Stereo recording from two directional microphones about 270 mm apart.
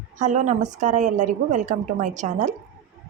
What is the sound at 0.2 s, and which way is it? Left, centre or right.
A woman's voice, right.